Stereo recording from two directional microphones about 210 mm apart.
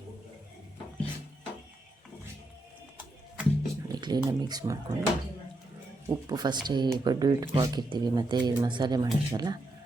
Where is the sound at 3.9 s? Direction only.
20° right (ahead or behind).